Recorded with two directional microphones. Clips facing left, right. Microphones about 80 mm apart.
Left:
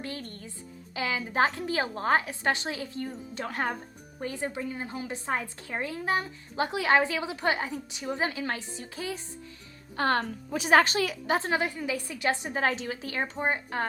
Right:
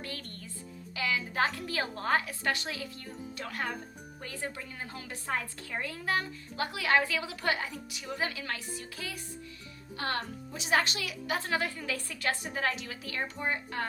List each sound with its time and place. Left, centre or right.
0.0 s a woman's voice: left
10.0 s a woman's voice: left